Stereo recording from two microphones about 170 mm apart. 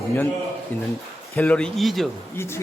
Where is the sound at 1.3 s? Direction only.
15° left (ahead or behind).